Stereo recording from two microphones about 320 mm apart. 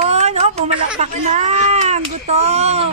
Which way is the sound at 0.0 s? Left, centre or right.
Centre.